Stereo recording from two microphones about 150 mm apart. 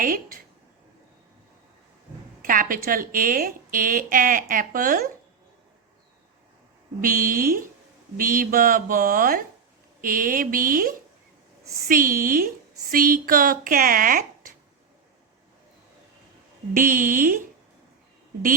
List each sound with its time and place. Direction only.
2.4 s a woman's voice: 65° right (ahead or behind)
7.0 s a woman's voice: 70° right (ahead or behind)
16.7 s a woman's voice: 65° right (ahead or behind)